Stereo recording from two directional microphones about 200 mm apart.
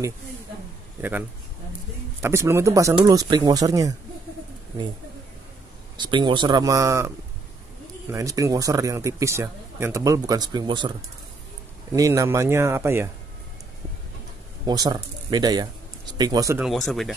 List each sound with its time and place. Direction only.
2.2 s speech: 15° right (ahead or behind)
5.9 s speech: 25° right (ahead or behind)
8.1 s speech: 15° right (ahead or behind)
11.9 s speech: 15° right (ahead or behind)
14.7 s a man's voice: 20° right (ahead or behind)
16.6 s speech: centre (ahead or behind)